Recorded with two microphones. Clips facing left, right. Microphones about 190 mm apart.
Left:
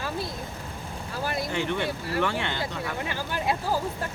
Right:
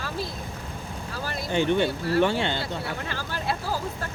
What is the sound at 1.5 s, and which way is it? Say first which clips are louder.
Speech: right 10 dB; 30° right (ahead or behind).